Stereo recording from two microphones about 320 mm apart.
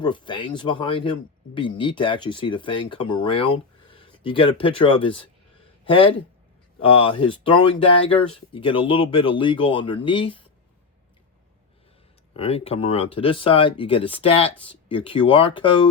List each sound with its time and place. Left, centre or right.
0.0 s speech: centre
12.3 s speech: centre